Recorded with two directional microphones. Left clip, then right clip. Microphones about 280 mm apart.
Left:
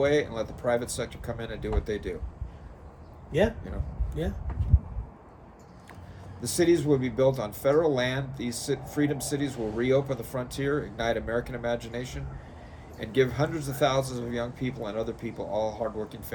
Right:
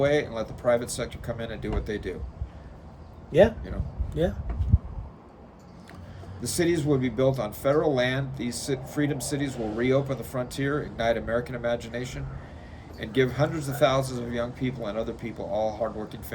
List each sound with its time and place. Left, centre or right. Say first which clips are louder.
0.0 s speech: right 1 dB; centre
3.3 s speech: right 6 dB; centre
6.4 s speech: left 2 dB; centre